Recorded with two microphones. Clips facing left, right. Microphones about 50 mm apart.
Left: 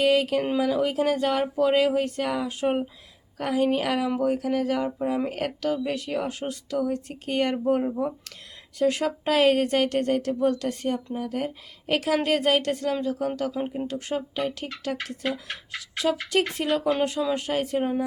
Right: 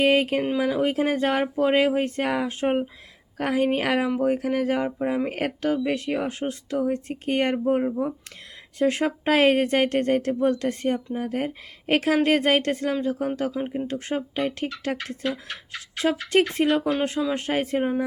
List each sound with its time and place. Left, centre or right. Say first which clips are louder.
0.0 s speech: right 1 dB; right
7.7 s speech: even; centre
8.8 s speech: right 1 dB; right